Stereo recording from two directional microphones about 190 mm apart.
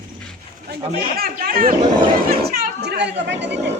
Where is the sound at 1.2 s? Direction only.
50° right (ahead or behind).